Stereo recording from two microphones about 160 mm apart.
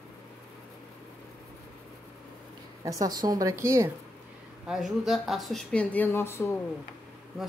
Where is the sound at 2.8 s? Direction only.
20° right (ahead or behind).